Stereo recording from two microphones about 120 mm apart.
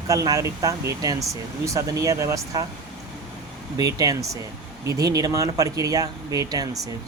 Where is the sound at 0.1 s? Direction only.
30° right (ahead or behind).